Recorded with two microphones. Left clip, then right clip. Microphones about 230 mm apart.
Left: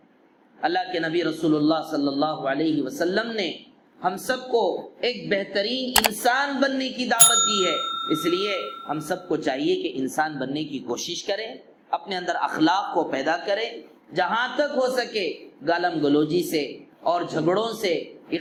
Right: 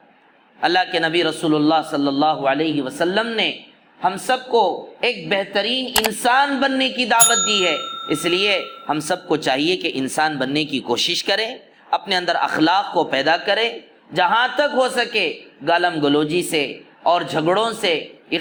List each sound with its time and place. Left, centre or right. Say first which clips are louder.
0.6 s a man's voice: right 7 dB; right
5.9 s a sound: left 2 dB; centre
6.2 s a man's voice: right 5 dB; right
7.2 s a sound: right 2 dB; centre
7.5 s speech: right 5 dB; right
7.8 s bell: even; centre
8.1 s a man's voice: right 8 dB; right